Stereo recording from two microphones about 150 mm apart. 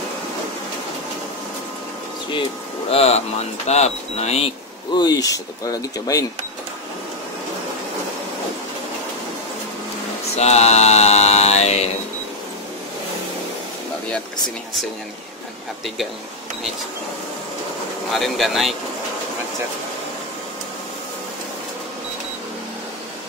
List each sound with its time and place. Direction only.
2.9 s speech: 45° left (ahead or behind)
4.9 s speech: 25° left (ahead or behind)
10.3 s mantra: 45° left (ahead or behind)
18.1 s speech: centre (ahead or behind)